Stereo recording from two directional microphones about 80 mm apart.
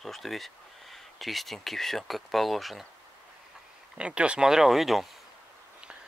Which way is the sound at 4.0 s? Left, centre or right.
Centre.